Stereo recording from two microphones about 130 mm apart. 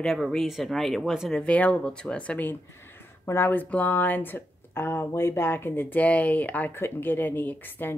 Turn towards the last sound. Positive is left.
turn(degrees=15)  # may be behind; listen again after turning